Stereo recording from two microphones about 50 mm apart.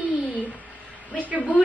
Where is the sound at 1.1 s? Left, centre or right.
Left.